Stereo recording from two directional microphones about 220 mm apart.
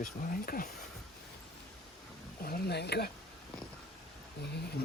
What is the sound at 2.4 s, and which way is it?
Speech, 45° left (ahead or behind).